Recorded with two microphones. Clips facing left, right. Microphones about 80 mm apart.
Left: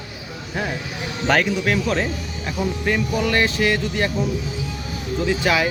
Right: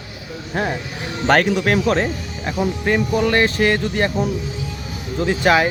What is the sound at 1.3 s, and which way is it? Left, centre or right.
Speech, right.